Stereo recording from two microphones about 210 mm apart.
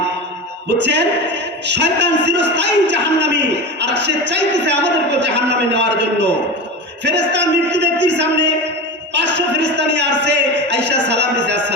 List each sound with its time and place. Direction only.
0.7 s a man's voice: 55° right (ahead or behind); by 2.9 s 75° right (ahead or behind)
2.9 s a man's voice: 55° right (ahead or behind)